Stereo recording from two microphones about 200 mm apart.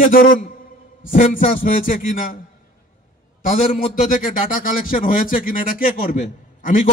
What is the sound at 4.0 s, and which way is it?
Speech, 40° left (ahead or behind).